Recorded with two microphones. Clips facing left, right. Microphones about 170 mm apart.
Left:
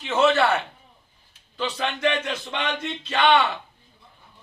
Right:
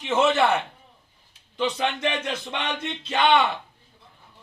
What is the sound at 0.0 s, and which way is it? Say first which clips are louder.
A man's voice: left 1 dB; 20° right (ahead or behind).